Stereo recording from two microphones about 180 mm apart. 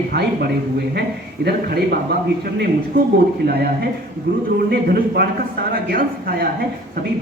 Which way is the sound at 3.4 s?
60° right (ahead or behind).